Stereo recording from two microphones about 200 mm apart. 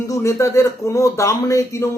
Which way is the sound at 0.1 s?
15° left (ahead or behind).